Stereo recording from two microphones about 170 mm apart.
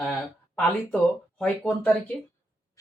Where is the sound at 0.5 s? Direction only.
5° left (ahead or behind).